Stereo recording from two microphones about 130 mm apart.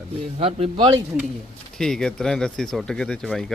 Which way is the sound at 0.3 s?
50° right (ahead or behind).